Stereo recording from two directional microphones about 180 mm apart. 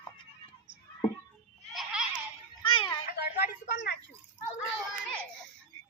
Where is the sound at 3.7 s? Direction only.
75° left (ahead or behind).